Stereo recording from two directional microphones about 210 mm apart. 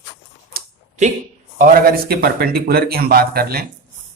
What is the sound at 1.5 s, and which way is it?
Speech, 40° right (ahead or behind).